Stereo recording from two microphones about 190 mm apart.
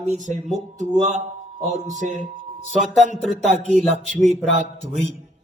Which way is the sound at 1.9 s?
40° right (ahead or behind).